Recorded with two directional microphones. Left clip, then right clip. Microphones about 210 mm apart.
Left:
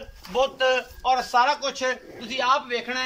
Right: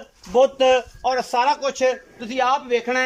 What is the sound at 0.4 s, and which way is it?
A man's voice, 35° right (ahead or behind).